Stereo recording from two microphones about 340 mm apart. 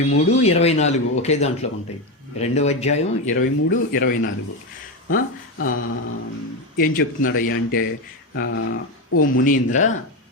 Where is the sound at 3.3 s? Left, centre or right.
Left.